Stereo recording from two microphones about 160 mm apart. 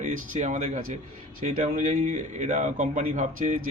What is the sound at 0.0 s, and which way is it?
A man's voice, 50° right (ahead or behind).